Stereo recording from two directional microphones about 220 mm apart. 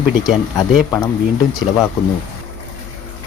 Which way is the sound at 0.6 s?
15° left (ahead or behind).